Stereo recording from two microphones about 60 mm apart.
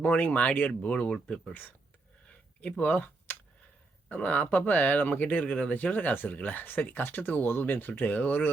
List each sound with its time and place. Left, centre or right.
0.0 s speech: left
1.1 s speech: centre
2.6 s speech: left